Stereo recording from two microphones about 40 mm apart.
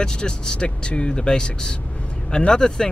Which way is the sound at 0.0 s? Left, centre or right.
Left.